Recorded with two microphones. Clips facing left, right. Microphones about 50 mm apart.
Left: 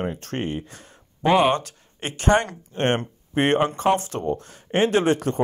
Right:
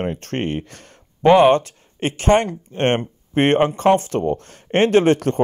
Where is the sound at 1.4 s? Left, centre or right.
Right.